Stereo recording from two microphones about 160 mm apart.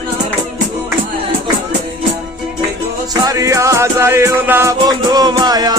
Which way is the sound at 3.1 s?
25° right (ahead or behind).